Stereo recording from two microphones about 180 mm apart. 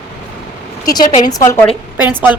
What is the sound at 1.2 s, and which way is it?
Speech, 15° left (ahead or behind).